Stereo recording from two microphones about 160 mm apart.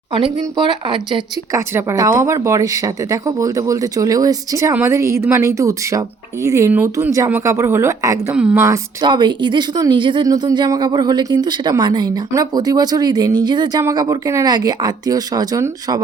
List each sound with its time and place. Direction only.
0.1 s speech: 30° right (ahead or behind)
1.5 s speech: 15° right (ahead or behind)
8.3 s a woman's voice: 10° right (ahead or behind)
8.6 s a woman's voice: 20° right (ahead or behind)
9.0 s speech: 30° right (ahead or behind)